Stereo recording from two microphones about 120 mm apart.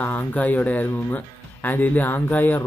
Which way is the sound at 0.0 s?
15° left (ahead or behind).